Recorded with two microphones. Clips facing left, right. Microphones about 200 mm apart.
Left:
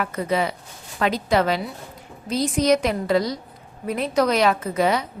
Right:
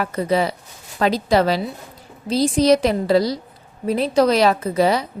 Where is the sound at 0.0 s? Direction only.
35° right (ahead or behind).